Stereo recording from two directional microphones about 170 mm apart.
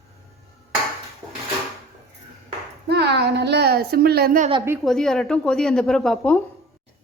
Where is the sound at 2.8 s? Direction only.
75° right (ahead or behind).